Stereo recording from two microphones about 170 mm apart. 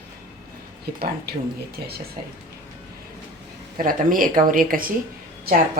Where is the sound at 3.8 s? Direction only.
55° right (ahead or behind).